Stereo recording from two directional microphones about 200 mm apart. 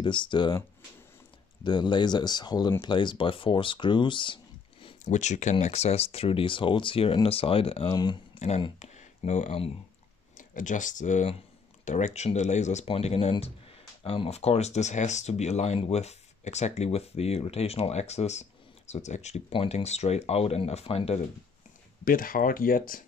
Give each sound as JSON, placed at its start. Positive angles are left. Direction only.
{"t": 0.0, "sound": "speech", "side_deg": 25}
{"t": 1.6, "sound": "speech", "side_deg": 20}
{"t": 4.8, "sound": "speech", "side_deg": 35}
{"t": 8.4, "sound": "speech", "side_deg": 30}
{"t": 22.0, "sound": "speech", "side_deg": 45}